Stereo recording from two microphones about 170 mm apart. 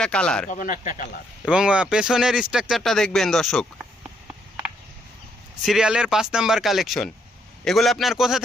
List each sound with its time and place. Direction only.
0.0 s speech: 5° left (ahead or behind)
0.5 s speech: 50° left (ahead or behind)
1.5 s speech: 5° right (ahead or behind)
5.6 s speech: 5° right (ahead or behind)